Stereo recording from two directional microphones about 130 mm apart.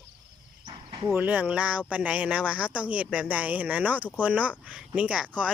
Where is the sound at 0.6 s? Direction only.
35° right (ahead or behind).